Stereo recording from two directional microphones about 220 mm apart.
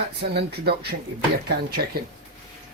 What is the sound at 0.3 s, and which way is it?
Speech, 45° right (ahead or behind).